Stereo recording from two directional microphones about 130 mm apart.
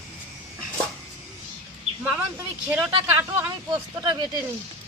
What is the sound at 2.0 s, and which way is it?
Speech, 10° right (ahead or behind).